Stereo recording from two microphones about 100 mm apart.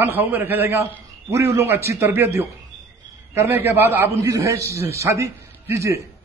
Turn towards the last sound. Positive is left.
turn(degrees=-30)  # may be behind; listen again after turning